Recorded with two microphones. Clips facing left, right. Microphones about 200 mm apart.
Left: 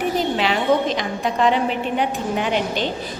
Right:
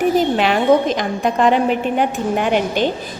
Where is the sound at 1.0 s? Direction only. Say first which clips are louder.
Right 3 dB; 50° right (ahead or behind).